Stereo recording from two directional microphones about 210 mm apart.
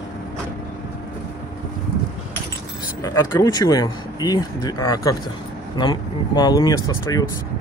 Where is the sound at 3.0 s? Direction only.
15° left (ahead or behind).